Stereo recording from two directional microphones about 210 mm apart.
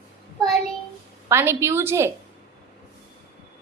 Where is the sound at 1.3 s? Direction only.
10° right (ahead or behind).